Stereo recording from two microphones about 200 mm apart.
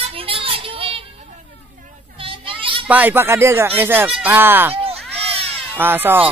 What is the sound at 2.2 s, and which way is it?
Goat, 25° right (ahead or behind).